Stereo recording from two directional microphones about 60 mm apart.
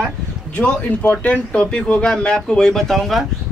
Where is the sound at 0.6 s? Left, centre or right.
Left; by 3.3 s centre.